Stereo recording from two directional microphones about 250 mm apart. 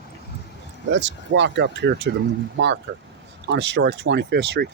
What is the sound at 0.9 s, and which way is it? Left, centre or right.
Speech, right.